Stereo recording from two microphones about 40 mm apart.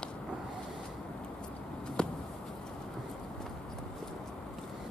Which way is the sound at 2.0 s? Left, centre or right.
Left.